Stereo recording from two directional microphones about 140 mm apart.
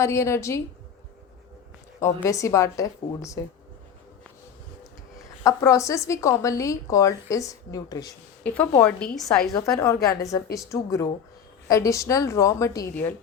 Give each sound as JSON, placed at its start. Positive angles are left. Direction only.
{"t": 0.0, "sound": "a woman's voice", "side_deg": 20}
{"t": 2.0, "sound": "a woman's voice", "side_deg": 20}
{"t": 5.4, "sound": "a woman's voice", "side_deg": 20}
{"t": 8.4, "sound": "a woman's voice", "side_deg": 10}
{"t": 9.5, "sound": "a woman's voice", "side_deg": 25}